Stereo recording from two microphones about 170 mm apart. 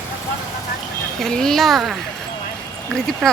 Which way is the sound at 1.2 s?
Centre (ahead or behind).